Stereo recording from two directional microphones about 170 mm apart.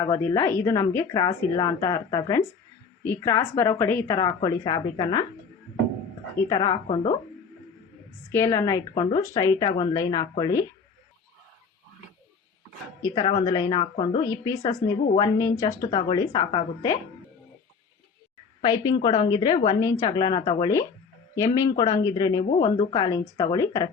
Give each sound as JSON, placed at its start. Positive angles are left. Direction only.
{"t": 0.0, "sound": "a woman's voice", "side_deg": 20}
{"t": 6.5, "sound": "a woman's voice", "side_deg": 25}
{"t": 8.3, "sound": "a woman's voice", "side_deg": 15}
{"t": 13.1, "sound": "a woman's voice", "side_deg": 30}
{"t": 18.6, "sound": "a woman's voice", "side_deg": 30}